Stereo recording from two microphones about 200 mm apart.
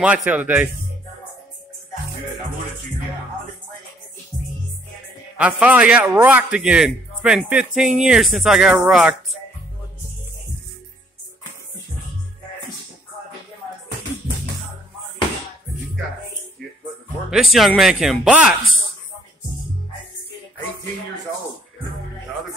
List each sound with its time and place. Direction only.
0.0 s speech: 5° right (ahead or behind)
5.4 s a man's voice: 5° right (ahead or behind)
17.3 s a man's voice: centre (ahead or behind)